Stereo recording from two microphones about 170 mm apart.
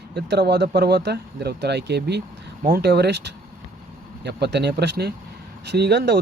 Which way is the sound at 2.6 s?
70° right (ahead or behind).